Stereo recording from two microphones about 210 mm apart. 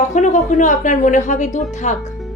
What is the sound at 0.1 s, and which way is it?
Speech, 35° left (ahead or behind).